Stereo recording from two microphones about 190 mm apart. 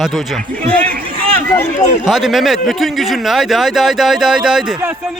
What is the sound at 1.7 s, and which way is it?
Speech, 40° left (ahead or behind).